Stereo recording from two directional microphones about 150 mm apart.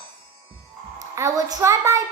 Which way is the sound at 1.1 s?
20° right (ahead or behind).